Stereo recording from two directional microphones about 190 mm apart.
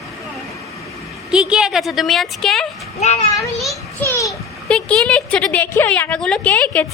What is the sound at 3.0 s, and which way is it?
Speech, 35° left (ahead or behind).